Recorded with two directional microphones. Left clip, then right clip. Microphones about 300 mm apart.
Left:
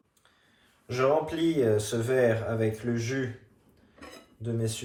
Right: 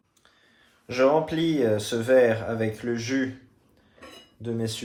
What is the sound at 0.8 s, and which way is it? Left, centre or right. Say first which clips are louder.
Speech: right 4 dB; right.